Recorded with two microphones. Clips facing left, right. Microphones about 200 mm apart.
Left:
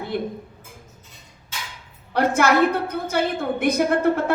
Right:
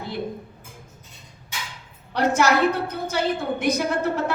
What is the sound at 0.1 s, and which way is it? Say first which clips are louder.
Speech: left 4 dB; 55° left (ahead or behind).